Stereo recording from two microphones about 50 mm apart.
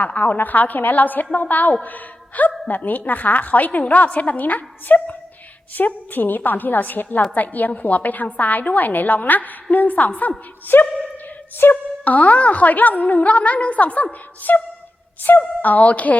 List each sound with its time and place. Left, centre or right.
0.0 s a woman's voice: left